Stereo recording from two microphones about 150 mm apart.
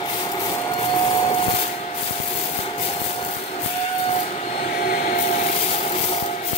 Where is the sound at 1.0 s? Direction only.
25° left (ahead or behind).